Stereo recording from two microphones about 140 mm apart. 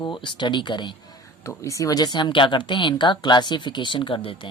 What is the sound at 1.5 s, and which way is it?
Speech, 20° left (ahead or behind).